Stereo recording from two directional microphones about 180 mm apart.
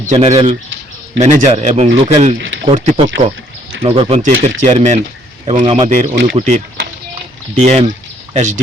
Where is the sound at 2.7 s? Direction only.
40° right (ahead or behind).